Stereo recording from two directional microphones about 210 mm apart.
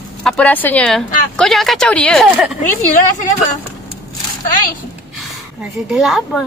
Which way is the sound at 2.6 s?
40° left (ahead or behind).